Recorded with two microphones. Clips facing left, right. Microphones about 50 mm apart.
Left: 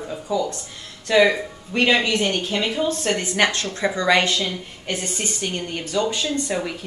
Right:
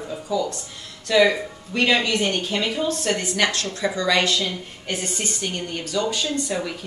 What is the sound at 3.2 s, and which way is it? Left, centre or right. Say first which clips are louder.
A woman's voice: left 2 dB; left.